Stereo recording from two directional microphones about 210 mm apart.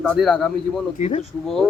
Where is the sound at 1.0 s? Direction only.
30° left (ahead or behind).